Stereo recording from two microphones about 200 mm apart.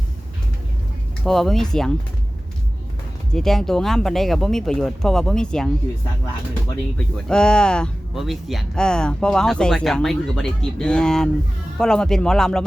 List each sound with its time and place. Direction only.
1.2 s speech: centre (ahead or behind)
3.3 s speech: centre (ahead or behind)
7.3 s speech: 5° left (ahead or behind)